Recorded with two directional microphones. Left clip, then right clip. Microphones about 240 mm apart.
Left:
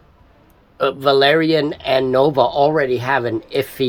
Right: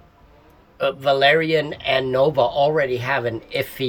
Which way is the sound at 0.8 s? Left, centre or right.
Left.